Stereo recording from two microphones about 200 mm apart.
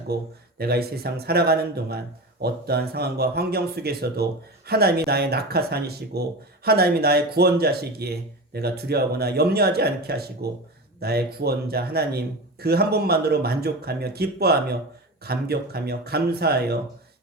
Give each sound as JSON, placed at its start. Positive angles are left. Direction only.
{"t": 0.6, "sound": "speech", "side_deg": -50}